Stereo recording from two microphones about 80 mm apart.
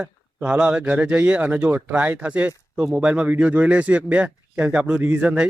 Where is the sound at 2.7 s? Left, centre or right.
Centre.